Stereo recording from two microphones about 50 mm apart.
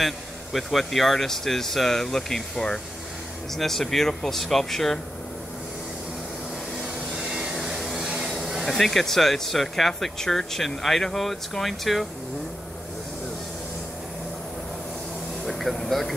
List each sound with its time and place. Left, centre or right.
0.0 s speech: centre
7.2 s a sound: centre
8.6 s speech: centre
15.4 s air conditioning: centre